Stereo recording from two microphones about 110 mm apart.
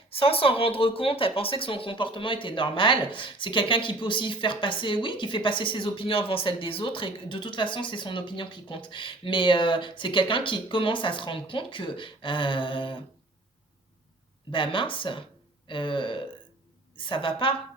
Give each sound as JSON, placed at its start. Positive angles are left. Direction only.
{"t": 0.1, "sound": "speech", "side_deg": 60}
{"t": 14.5, "sound": "speech", "side_deg": 50}